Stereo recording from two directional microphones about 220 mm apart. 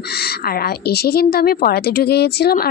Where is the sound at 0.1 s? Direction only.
45° left (ahead or behind).